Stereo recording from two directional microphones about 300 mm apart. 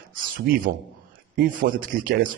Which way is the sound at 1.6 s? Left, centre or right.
Right.